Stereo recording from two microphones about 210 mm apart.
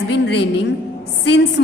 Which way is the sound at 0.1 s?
55° left (ahead or behind).